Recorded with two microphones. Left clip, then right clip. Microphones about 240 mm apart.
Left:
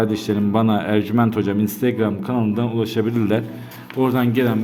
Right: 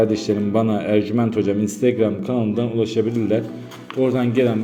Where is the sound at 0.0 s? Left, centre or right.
Centre.